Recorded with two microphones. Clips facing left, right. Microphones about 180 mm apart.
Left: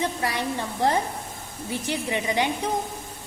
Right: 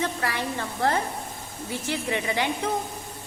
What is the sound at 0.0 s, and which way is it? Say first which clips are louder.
A woman's voice: left 1 dB; 15° left (ahead or behind).